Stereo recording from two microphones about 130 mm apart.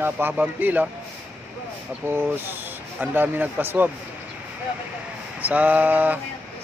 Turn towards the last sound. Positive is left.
turn(degrees=-10)  # may be behind; listen again after turning